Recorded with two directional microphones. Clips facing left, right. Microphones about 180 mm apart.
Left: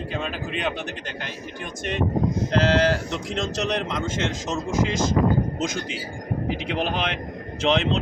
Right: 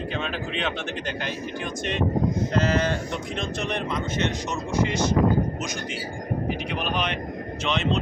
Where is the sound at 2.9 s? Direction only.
90° left.